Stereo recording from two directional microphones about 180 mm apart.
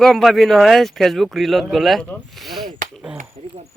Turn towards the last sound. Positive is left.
turn(degrees=-5)  # may be behind; listen again after turning